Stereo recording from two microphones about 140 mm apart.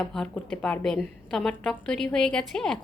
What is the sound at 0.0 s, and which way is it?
A woman's voice, 5° left (ahead or behind).